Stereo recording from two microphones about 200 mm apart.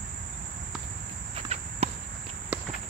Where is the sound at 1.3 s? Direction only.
30° right (ahead or behind).